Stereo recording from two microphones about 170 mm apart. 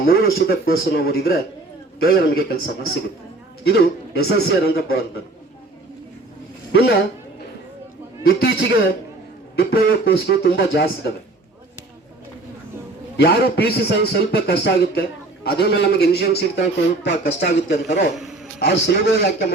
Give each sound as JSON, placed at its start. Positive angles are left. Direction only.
{"t": 0.0, "sound": "a man's voice", "side_deg": 60}
{"t": 6.7, "sound": "a man's voice", "side_deg": 70}
{"t": 8.4, "sound": "a man's voice", "side_deg": 75}
{"t": 13.1, "sound": "a man's voice", "side_deg": 70}